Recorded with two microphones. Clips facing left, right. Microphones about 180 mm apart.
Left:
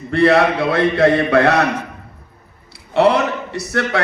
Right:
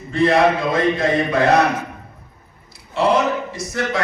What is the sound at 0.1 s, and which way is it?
A man's voice, 65° left (ahead or behind).